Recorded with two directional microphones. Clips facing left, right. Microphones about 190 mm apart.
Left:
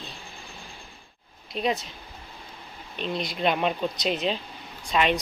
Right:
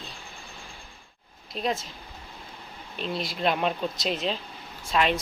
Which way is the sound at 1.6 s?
Centre (ahead or behind).